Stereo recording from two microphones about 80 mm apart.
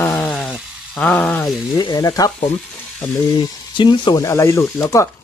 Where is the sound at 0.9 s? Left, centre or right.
Centre.